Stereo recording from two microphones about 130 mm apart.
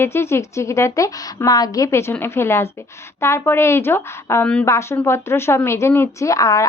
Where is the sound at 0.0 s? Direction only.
20° left (ahead or behind).